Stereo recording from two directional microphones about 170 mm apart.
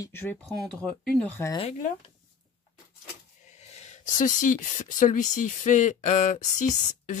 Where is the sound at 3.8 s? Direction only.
45° left (ahead or behind).